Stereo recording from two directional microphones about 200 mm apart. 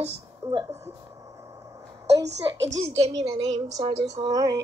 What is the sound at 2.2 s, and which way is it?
Speech, 60° right (ahead or behind).